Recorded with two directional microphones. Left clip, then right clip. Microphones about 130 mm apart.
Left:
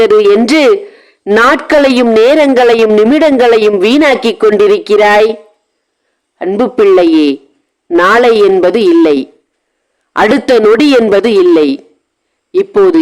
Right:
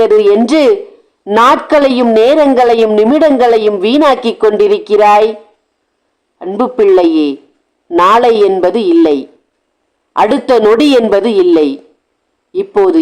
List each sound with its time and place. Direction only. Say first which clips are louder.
0.0 s speech: left 1 dB; 30° left (ahead or behind)
6.6 s speech: left 1 dB; 30° left (ahead or behind)